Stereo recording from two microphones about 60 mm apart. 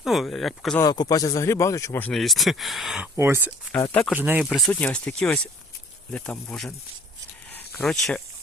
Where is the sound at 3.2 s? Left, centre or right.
Right.